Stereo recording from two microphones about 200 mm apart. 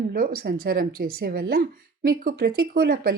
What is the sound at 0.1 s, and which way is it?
Speech, 45° right (ahead or behind).